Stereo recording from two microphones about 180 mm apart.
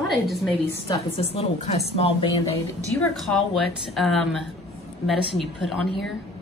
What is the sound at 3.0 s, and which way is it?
Speech, centre (ahead or behind).